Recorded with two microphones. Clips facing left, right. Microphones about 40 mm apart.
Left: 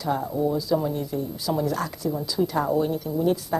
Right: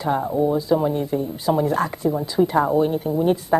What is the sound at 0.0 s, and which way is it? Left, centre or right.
Speech, right.